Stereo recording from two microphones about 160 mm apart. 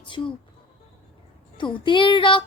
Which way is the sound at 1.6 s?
30° left (ahead or behind).